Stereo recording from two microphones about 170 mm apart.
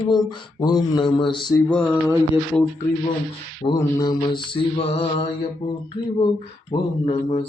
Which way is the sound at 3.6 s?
25° left (ahead or behind).